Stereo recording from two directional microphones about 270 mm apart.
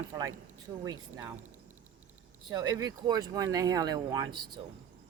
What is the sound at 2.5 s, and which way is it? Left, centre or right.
Speech, centre.